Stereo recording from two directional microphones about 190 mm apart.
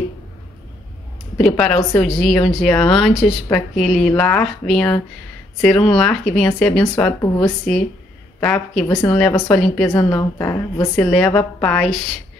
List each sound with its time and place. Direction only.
1.4 s a woman's voice: 5° left (ahead or behind)
7.2 s a woman's voice: 20° left (ahead or behind)
8.4 s a woman's voice: 5° left (ahead or behind)